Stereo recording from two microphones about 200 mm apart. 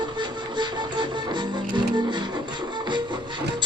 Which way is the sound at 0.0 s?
20° right (ahead or behind).